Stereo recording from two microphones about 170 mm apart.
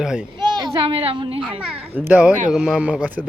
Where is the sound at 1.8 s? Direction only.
10° right (ahead or behind).